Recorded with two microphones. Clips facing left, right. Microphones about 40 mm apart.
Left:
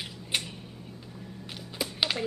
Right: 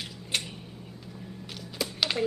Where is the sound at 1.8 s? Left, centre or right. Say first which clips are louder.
Right 1 dB; centre.